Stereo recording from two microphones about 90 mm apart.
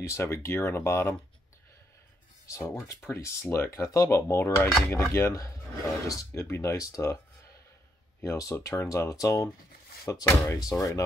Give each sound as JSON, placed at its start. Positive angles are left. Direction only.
{"t": 0.0, "sound": "speech", "side_deg": 30}
{"t": 2.4, "sound": "speech", "side_deg": 35}
{"t": 8.2, "sound": "speech", "side_deg": 35}
{"t": 8.8, "sound": "speech", "side_deg": 40}